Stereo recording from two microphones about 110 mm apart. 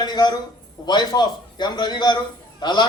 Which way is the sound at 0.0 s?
40° left (ahead or behind).